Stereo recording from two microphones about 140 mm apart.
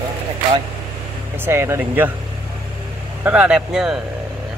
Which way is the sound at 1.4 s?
20° right (ahead or behind).